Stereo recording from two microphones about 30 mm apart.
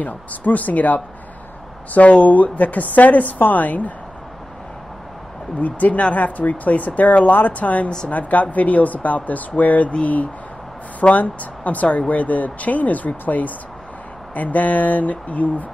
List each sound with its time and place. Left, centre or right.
0.0 s a woman's voice: left
2.0 s a woman's voice: left
5.6 s a woman's voice: left
11.0 s a woman's voice: left